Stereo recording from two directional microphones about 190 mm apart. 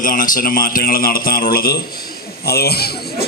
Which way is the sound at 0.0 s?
45° left (ahead or behind).